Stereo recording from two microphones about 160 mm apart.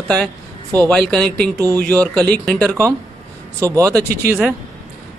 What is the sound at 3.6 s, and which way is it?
Speech, 20° right (ahead or behind).